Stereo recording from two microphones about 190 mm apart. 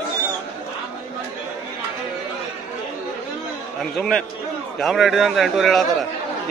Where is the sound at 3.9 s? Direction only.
Centre (ahead or behind).